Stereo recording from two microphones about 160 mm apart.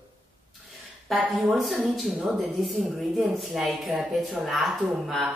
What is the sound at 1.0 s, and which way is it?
Speech, centre (ahead or behind).